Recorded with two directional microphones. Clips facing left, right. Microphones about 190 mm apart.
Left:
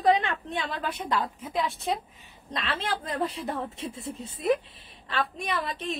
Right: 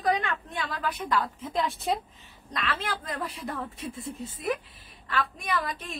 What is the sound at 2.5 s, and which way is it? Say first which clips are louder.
A woman's voice: left 1 dB; 25° left (ahead or behind).